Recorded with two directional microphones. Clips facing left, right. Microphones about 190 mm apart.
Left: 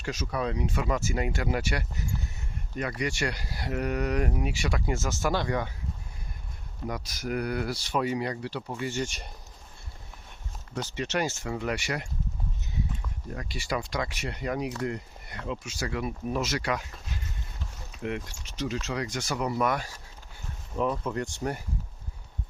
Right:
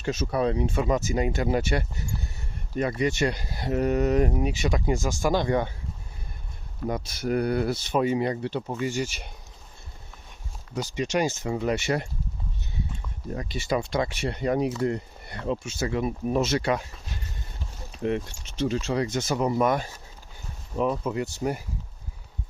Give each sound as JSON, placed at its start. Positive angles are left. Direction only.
{"t": 0.0, "sound": "speech", "side_deg": -25}
{"t": 5.5, "sound": "speech", "side_deg": -25}
{"t": 6.8, "sound": "speech", "side_deg": -25}
{"t": 10.8, "sound": "speech", "side_deg": -15}
{"t": 13.3, "sound": "speech", "side_deg": -20}
{"t": 17.9, "sound": "speech", "side_deg": -30}
{"t": 20.7, "sound": "speech", "side_deg": -10}